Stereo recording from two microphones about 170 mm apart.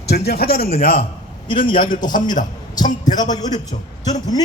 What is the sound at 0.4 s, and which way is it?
A man's voice, 35° left (ahead or behind).